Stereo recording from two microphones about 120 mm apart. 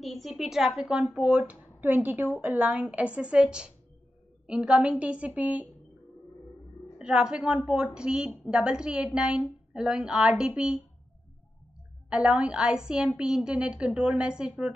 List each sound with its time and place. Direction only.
0.0 s a woman's voice: centre (ahead or behind)
1.5 s a sound: 15° right (ahead or behind)
2.0 s a woman's voice: 15° right (ahead or behind)
7.0 s a woman's voice: 5° right (ahead or behind)
12.1 s a woman's voice: 10° right (ahead or behind)